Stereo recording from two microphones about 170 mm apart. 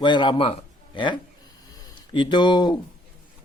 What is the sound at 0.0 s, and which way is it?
A man's voice, 25° left (ahead or behind).